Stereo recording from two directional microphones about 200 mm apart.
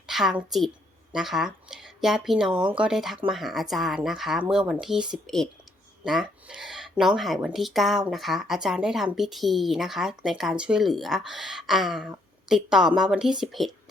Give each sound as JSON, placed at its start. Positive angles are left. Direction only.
{"t": 0.1, "sound": "a woman's voice", "side_deg": 0}
{"t": 2.5, "sound": "speech", "side_deg": -25}
{"t": 2.7, "sound": "speech", "side_deg": -5}